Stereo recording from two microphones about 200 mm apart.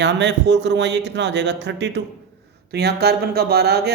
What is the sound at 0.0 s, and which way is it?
A man's voice, 60° right (ahead or behind).